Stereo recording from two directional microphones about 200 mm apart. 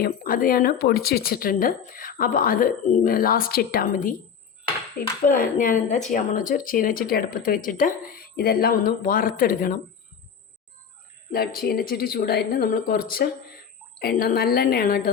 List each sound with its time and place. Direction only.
0.0 s speech: 45° left (ahead or behind)
5.2 s speech: 45° left (ahead or behind)
11.3 s speech: 50° left (ahead or behind)